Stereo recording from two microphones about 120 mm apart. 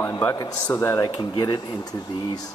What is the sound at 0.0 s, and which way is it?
A man's voice, 20° left (ahead or behind).